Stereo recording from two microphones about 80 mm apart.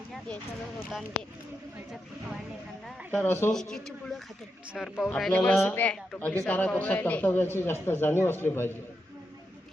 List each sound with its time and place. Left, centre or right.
3.2 s a man's voice: left
3.5 s speech: centre
5.3 s a man's voice: centre